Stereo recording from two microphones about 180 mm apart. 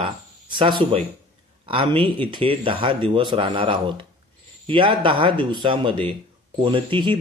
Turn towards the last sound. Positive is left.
turn(degrees=-25)  # may be behind; listen again after turning